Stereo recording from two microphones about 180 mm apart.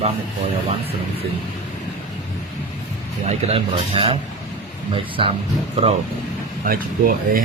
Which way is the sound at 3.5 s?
30° right (ahead or behind).